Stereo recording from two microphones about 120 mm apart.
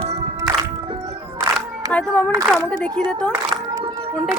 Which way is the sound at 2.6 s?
10° left (ahead or behind).